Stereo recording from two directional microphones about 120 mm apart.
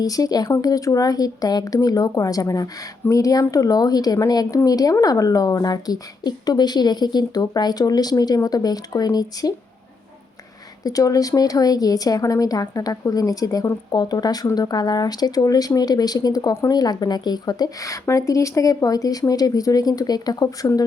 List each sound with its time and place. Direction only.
0.0 s a woman's voice: 30° left (ahead or behind)
10.8 s a woman's voice: 30° left (ahead or behind)